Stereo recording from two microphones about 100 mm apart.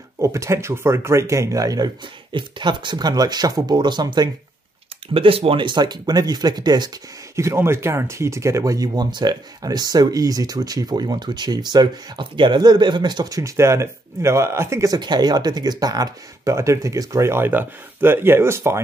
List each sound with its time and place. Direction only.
0.2 s speech: 30° right (ahead or behind)
2.3 s speech: 55° right (ahead or behind)
5.1 s speech: 65° right (ahead or behind); by 6.9 s 45° right (ahead or behind)
7.3 s speech: 25° right (ahead or behind)
15.0 s speech: 45° right (ahead or behind); by 18.8 s 25° right (ahead or behind)